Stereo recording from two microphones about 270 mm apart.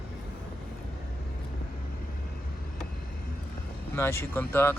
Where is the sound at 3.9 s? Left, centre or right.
Centre.